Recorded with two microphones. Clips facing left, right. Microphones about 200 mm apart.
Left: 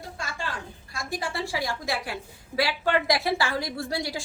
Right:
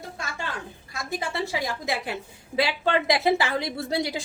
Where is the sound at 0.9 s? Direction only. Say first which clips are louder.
Right 2 dB; 20° right (ahead or behind).